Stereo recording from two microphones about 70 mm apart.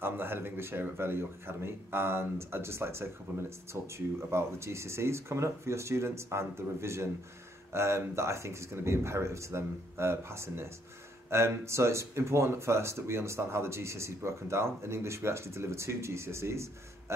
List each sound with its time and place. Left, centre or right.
0.0 s speech: right